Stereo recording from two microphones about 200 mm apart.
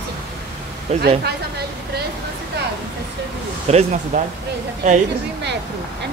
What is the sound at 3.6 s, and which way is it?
Speech, 35° right (ahead or behind).